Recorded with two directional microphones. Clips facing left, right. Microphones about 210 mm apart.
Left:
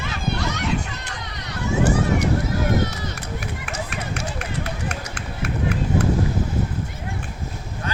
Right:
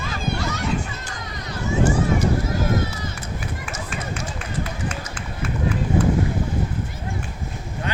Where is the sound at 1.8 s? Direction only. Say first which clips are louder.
Even; 65° left (ahead or behind).